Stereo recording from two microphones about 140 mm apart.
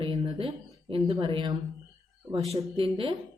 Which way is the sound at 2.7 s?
40° right (ahead or behind).